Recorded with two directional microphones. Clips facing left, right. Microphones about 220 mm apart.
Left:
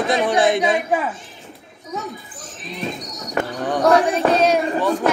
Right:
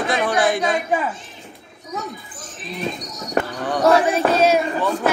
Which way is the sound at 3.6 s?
15° left (ahead or behind).